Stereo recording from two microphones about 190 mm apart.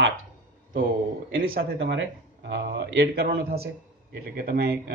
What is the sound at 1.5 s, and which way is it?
Speech, 60° right (ahead or behind).